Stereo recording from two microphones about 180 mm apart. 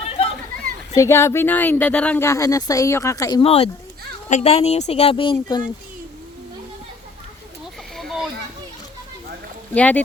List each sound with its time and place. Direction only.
0.0 s a sound: 35° left (ahead or behind)
0.9 s speech: 15° left (ahead or behind)
3.4 s speech: 35° left (ahead or behind)
7.9 s children playing: centre (ahead or behind)
9.7 s speech: 10° left (ahead or behind)